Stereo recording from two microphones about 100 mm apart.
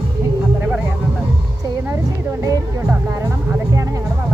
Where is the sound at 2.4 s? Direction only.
30° right (ahead or behind).